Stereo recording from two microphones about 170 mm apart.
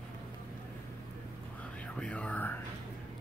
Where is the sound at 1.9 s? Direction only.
5° left (ahead or behind).